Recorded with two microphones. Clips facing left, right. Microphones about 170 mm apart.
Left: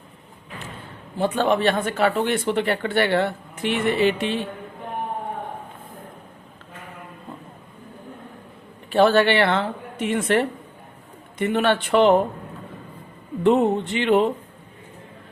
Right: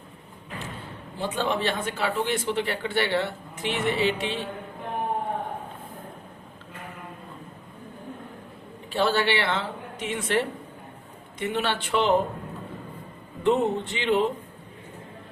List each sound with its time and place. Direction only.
1.2 s speech: 60° left (ahead or behind)
8.9 s speech: 60° left (ahead or behind)
13.4 s speech: 60° left (ahead or behind)